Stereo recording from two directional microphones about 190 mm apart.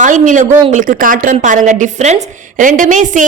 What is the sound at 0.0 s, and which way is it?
A man's voice, 40° right (ahead or behind).